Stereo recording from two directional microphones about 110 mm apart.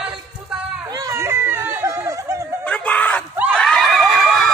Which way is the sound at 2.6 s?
10° left (ahead or behind).